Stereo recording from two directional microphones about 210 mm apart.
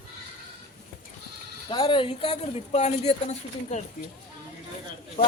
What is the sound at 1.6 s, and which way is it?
Speech, 25° left (ahead or behind).